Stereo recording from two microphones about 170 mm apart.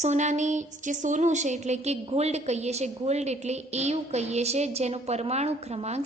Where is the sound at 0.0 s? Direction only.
45° right (ahead or behind).